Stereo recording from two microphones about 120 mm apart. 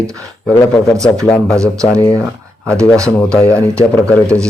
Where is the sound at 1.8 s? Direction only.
30° left (ahead or behind).